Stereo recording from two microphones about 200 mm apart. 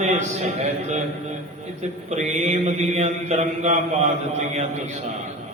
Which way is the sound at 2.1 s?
35° right (ahead or behind).